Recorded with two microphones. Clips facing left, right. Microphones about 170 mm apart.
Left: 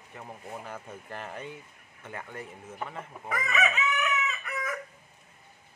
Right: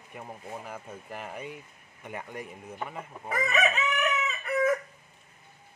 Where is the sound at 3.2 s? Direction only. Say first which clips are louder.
Right 2 dB; 30° right (ahead or behind).